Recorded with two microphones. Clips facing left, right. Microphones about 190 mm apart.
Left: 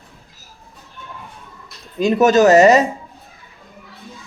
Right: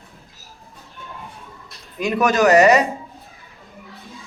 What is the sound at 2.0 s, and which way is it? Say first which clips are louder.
Speech: left 5 dB; 25° left (ahead or behind).